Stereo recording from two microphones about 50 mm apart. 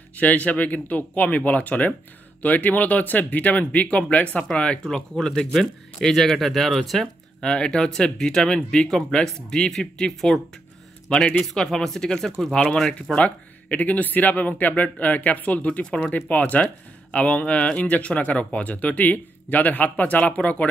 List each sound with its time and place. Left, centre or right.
0.2 s speech: left; by 7.1 s centre
7.4 s speech: centre
11.4 s speech: centre
13.1 s speech: left